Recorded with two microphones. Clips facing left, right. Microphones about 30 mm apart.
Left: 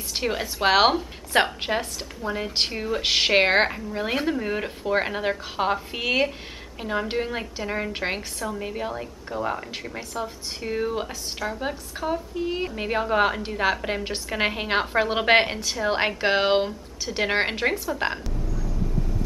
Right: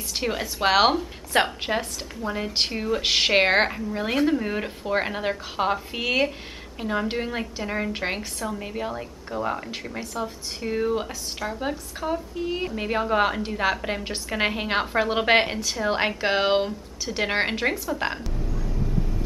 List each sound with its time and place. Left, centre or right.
0.1 s a woman's voice: centre
18.5 s vehicle: right
18.9 s vehicle: centre